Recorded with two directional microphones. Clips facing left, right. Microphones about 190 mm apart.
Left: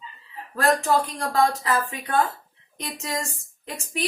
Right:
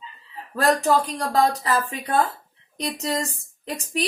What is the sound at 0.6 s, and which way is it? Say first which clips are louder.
Speech: right 2 dB; 35° right (ahead or behind).